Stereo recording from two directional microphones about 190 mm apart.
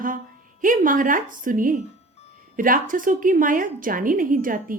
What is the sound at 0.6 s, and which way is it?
A woman's voice, 45° right (ahead or behind).